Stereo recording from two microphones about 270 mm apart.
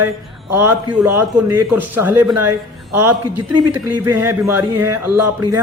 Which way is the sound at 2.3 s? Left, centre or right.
Right.